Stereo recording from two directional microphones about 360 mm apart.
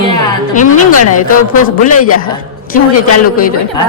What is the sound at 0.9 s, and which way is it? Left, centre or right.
Speech, left.